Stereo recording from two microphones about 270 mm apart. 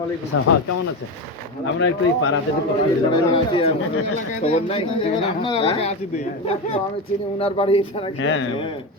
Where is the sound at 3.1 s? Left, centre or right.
Centre.